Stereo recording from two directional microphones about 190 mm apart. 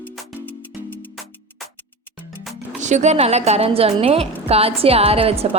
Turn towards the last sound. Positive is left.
turn(degrees=-30)  # may be behind; listen again after turning